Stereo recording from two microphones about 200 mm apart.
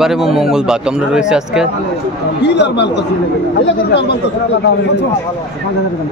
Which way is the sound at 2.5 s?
60° left (ahead or behind).